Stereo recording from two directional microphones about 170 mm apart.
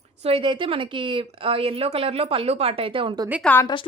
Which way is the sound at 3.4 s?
10° left (ahead or behind).